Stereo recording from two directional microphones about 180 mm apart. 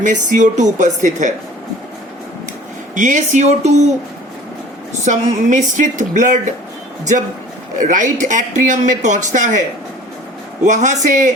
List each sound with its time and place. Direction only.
0.0 s speech: 45° right (ahead or behind)
2.9 s speech: 45° right (ahead or behind)
5.0 s speech: 45° right (ahead or behind)
7.8 s speech: 45° right (ahead or behind)